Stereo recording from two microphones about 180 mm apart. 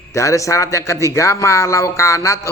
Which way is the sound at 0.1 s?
15° left (ahead or behind).